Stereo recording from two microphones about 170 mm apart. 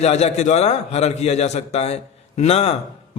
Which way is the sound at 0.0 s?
40° left (ahead or behind).